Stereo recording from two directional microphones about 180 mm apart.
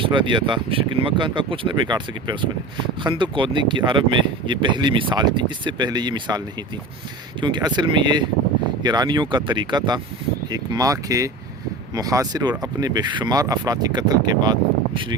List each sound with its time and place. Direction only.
0.0 s speech: 25° right (ahead or behind)
7.4 s speech: 25° right (ahead or behind)